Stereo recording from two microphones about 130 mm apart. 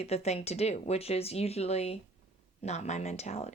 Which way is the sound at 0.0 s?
55° left (ahead or behind).